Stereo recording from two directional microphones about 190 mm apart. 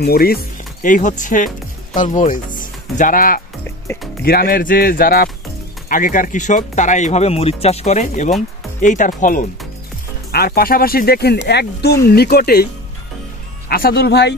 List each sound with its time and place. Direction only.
0.0 s speech: 55° left (ahead or behind)
0.8 s speech: 40° left (ahead or behind)
3.6 s music: 10° left (ahead or behind)
4.2 s speech: 55° left (ahead or behind)
10.3 s speech: 55° left (ahead or behind)
13.7 s speech: 55° left (ahead or behind)